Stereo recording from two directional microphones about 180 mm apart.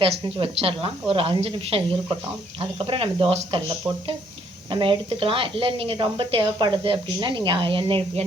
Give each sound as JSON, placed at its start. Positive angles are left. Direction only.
{"t": 0.3, "sound": "a woman's voice", "side_deg": -30}
{"t": 4.7, "sound": "a woman's voice", "side_deg": -30}